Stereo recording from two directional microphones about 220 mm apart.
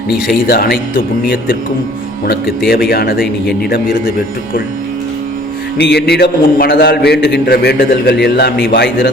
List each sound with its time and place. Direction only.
0.4 s a man's voice: 45° left (ahead or behind)
2.6 s a man's voice: 45° left (ahead or behind)
5.7 s a man's voice: 45° left (ahead or behind)